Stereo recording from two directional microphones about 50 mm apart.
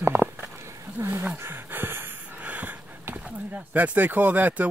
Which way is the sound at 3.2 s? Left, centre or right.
Right.